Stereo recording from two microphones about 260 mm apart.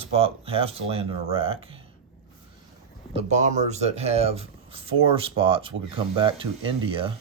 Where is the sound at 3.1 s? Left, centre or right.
Right.